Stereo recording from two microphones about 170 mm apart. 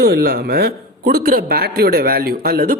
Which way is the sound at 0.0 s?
65° right (ahead or behind).